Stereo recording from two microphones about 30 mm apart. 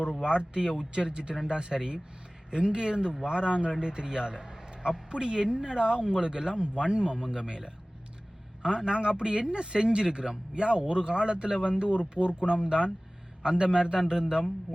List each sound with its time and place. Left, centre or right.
0.3 s a man's voice: right